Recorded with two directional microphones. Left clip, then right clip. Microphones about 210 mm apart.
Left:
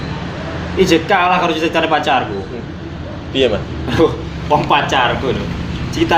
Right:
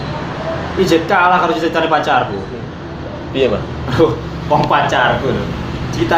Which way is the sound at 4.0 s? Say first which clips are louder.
Right 1 dB; 45° left (ahead or behind).